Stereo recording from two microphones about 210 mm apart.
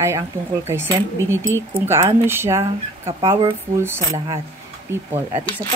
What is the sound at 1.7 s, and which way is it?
Speech, 10° right (ahead or behind).